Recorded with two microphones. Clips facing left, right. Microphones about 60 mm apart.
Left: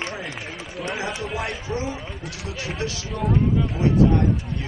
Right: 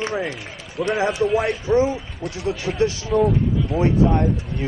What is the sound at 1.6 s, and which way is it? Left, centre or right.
Speech, right.